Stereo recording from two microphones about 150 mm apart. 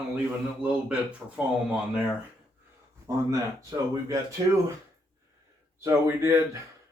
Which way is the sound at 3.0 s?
20° right (ahead or behind).